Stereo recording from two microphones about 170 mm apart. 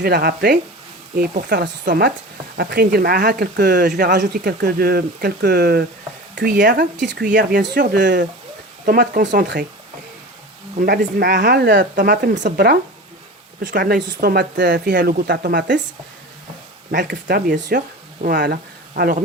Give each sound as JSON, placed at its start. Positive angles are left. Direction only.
{"t": 0.0, "sound": "speech", "side_deg": -65}
{"t": 6.3, "sound": "speech", "side_deg": -55}
{"t": 8.9, "sound": "speech", "side_deg": -65}
{"t": 10.8, "sound": "speech", "side_deg": -65}
{"t": 12.3, "sound": "speech", "side_deg": -50}
{"t": 16.9, "sound": "speech", "side_deg": -80}